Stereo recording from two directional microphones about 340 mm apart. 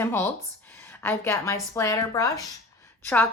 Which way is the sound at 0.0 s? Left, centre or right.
Centre.